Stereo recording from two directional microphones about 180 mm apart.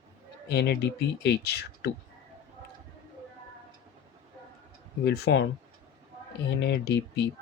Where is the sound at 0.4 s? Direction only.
65° left (ahead or behind).